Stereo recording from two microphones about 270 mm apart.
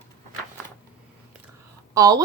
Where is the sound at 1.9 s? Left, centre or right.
Centre.